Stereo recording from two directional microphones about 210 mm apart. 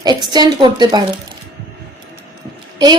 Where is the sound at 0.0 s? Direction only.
20° right (ahead or behind).